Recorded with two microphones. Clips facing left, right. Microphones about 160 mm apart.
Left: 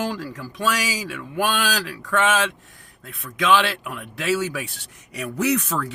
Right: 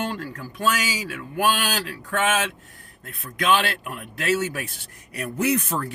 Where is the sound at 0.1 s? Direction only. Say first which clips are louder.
Left 2 dB; 80° left.